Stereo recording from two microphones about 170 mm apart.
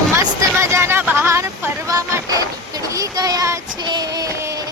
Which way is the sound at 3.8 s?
25° right (ahead or behind).